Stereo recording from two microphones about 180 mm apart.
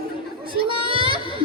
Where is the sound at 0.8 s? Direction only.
30° right (ahead or behind).